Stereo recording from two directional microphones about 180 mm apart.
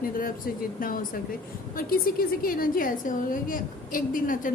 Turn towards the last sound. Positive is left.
turn(degrees=50)  # may be behind; listen again after turning